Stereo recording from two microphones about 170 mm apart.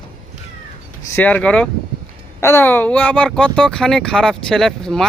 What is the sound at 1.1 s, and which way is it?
Speech, 10° left (ahead or behind).